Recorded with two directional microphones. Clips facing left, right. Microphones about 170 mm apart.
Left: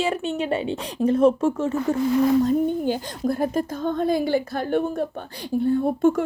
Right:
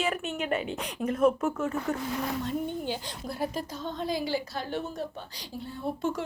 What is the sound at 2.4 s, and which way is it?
A woman's voice, 45° left (ahead or behind).